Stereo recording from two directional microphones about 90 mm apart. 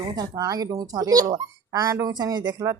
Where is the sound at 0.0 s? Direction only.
50° right (ahead or behind).